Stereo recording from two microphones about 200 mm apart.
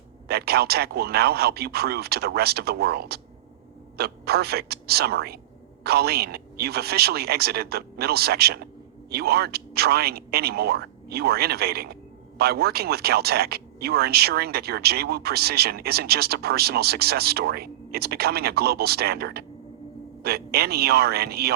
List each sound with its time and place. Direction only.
0.3 s speech: 50° right (ahead or behind)